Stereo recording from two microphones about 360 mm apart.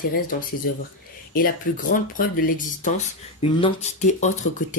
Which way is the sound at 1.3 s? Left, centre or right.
Left.